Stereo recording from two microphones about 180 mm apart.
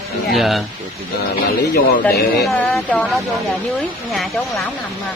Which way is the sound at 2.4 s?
5° left (ahead or behind).